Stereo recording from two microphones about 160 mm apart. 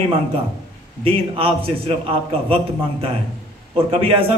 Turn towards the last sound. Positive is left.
turn(degrees=-35)  # may be behind; listen again after turning